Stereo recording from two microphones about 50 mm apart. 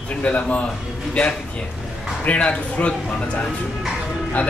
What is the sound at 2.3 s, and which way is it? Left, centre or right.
A man's voice, left.